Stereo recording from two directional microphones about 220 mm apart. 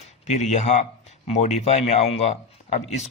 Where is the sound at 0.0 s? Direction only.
30° left (ahead or behind).